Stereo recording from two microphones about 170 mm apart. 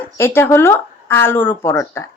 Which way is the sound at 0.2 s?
15° left (ahead or behind).